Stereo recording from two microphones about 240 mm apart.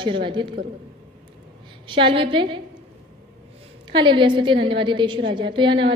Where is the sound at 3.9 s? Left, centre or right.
Centre.